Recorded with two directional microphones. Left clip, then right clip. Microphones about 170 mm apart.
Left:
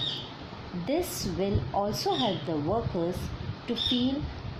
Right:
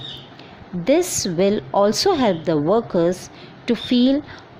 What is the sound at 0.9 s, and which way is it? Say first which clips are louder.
A woman's voice: right 12 dB; 65° right (ahead or behind).